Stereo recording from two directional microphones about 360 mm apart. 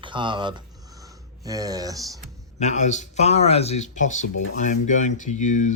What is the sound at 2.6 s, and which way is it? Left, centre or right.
Speech, centre.